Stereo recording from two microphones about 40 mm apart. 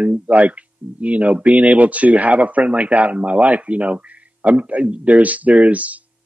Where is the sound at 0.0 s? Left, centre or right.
Right.